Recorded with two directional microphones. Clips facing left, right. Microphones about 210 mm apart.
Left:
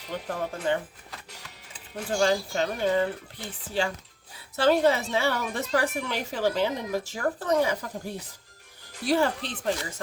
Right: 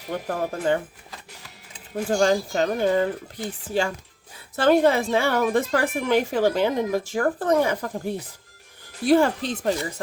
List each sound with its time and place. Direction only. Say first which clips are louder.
0.1 s a woman's voice: right 5 dB; 50° right (ahead or behind)
2.0 s a woman's voice: right 4 dB; 45° right (ahead or behind)